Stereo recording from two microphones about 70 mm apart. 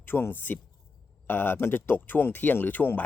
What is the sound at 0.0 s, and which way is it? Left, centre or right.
Speech, left.